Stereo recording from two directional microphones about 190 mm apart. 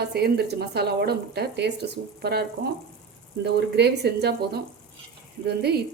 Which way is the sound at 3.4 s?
60° right (ahead or behind).